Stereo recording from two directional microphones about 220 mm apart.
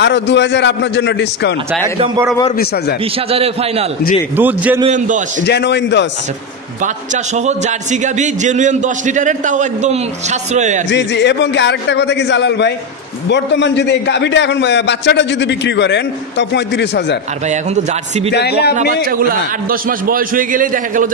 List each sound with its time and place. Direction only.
0.0 s a man's voice: 55° left (ahead or behind)
3.3 s a man's voice: 25° right (ahead or behind)
4.4 s a man's voice: 10° right (ahead or behind)
4.8 s a man's voice: 35° right (ahead or behind)
5.4 s a man's voice: 50° left (ahead or behind)
7.3 s a man's voice: 30° right (ahead or behind)
10.9 s a man's voice: 50° left (ahead or behind)
17.5 s a man's voice: 30° right (ahead or behind)
18.3 s a man's voice: 45° left (ahead or behind)
19.7 s a man's voice: 40° right (ahead or behind)